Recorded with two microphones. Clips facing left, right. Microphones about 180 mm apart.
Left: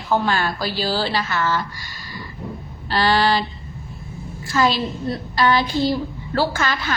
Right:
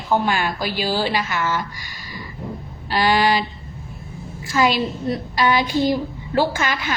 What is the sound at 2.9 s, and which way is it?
Speech, 15° right (ahead or behind).